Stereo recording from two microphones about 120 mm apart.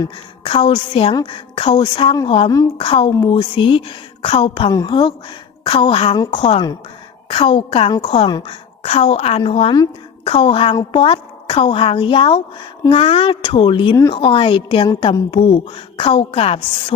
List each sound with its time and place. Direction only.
0.4 s a woman's voice: 50° left (ahead or behind)
3.1 s speech: 30° left (ahead or behind)
3.3 s a woman's voice: 45° left (ahead or behind)